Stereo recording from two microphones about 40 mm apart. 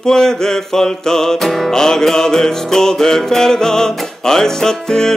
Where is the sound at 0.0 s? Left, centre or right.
Centre.